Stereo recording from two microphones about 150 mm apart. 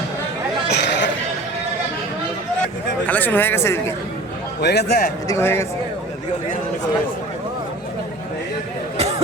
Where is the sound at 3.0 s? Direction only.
10° left (ahead or behind).